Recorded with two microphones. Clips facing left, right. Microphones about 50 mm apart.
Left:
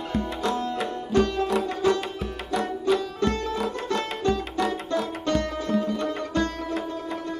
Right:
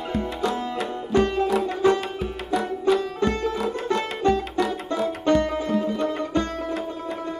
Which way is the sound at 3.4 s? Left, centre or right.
Centre.